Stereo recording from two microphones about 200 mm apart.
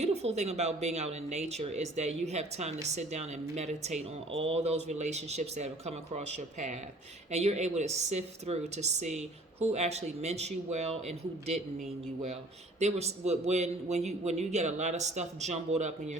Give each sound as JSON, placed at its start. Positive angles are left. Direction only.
{"t": 0.0, "sound": "speech", "side_deg": -30}
{"t": 12.8, "sound": "speech", "side_deg": -35}